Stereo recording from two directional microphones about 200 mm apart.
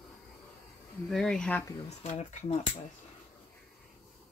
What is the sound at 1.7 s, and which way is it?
Speech, 35° left (ahead or behind).